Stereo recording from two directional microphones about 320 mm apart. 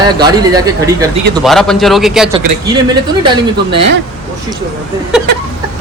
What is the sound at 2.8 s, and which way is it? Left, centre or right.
Speech, centre.